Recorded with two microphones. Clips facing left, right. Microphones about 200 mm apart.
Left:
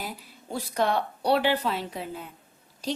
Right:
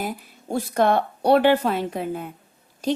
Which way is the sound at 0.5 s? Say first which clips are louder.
Right 6 dB; 50° right (ahead or behind).